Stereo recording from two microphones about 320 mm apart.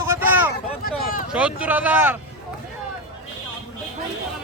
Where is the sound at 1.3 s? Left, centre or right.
Centre.